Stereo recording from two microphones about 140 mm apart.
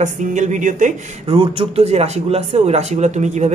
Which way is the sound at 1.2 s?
40° right (ahead or behind).